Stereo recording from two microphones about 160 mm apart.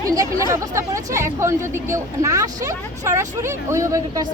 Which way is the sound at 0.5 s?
20° right (ahead or behind).